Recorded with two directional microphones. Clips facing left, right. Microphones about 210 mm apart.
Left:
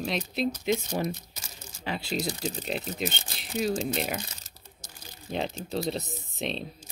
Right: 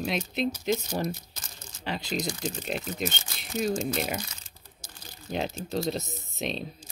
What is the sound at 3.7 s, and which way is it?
Speech, 35° left (ahead or behind).